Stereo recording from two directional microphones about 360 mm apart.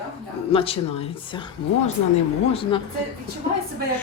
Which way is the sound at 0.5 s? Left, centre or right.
Centre.